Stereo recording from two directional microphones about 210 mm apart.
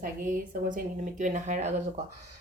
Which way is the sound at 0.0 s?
40° right (ahead or behind).